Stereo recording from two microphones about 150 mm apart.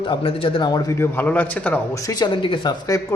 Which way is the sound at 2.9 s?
20° left (ahead or behind).